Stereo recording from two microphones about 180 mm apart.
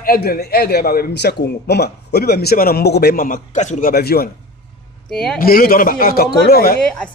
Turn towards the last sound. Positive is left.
turn(degrees=60)  # may be behind; listen again after turning